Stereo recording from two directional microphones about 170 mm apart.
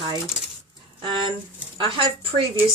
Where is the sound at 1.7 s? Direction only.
30° right (ahead or behind).